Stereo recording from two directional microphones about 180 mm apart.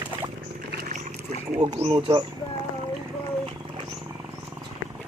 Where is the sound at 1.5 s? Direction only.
25° right (ahead or behind).